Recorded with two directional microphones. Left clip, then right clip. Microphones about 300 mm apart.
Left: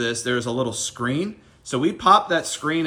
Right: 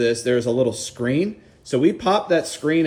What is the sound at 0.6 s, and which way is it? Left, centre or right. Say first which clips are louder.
Speech: right 4 dB; centre.